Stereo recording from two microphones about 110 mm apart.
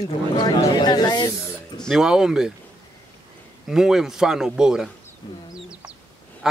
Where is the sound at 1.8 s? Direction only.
5° right (ahead or behind).